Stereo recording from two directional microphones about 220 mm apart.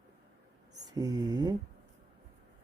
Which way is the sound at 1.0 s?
15° right (ahead or behind).